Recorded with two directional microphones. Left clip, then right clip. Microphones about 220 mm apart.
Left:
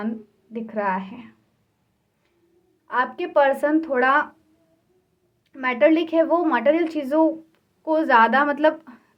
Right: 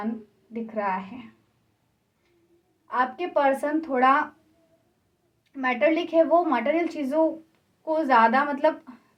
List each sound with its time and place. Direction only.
0.5 s a woman's voice: 50° left (ahead or behind)
2.8 s a woman's voice: 50° left (ahead or behind)
5.5 s a woman's voice: 50° left (ahead or behind)